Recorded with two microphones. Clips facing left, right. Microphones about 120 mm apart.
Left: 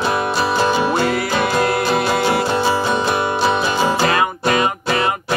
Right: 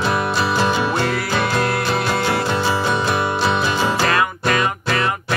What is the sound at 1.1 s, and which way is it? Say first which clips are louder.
Music: left 2 dB; 20° left (ahead or behind).